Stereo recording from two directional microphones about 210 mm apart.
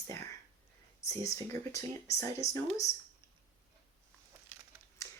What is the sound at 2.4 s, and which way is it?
Speech, 30° left (ahead or behind).